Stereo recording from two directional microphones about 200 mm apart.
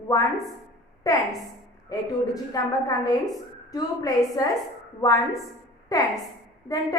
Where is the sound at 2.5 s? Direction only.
20° left (ahead or behind).